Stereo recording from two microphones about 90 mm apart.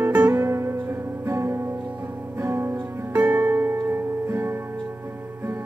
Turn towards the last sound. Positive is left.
turn(degrees=-30)  # may be behind; listen again after turning